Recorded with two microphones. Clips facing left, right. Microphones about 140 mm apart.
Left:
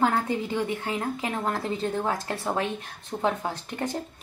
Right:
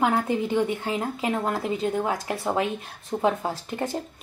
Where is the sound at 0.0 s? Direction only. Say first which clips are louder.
Right 2 dB; 15° right (ahead or behind).